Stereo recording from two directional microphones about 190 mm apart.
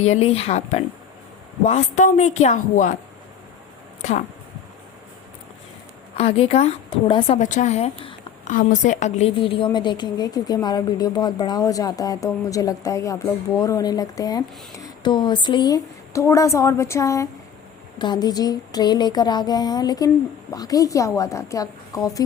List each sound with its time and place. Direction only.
0.0 s a woman's voice: 35° left (ahead or behind)
6.1 s a woman's voice: 30° left (ahead or behind)
8.4 s a woman's voice: 40° left (ahead or behind); by 22.2 s 20° left (ahead or behind)